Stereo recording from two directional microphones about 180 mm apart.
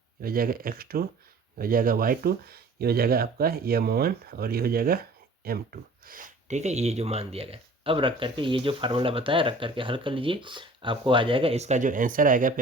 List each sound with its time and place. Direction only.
0.2 s speech: 55° right (ahead or behind)